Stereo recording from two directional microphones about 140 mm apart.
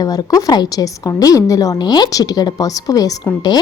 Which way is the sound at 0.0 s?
25° left (ahead or behind).